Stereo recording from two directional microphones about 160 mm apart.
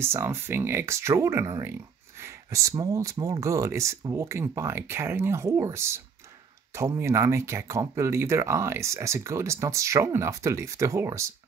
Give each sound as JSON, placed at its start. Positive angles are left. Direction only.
{"t": 0.0, "sound": "speech", "side_deg": -15}